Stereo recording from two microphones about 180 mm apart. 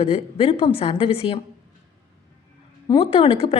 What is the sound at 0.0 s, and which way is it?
A woman's voice, 35° left (ahead or behind).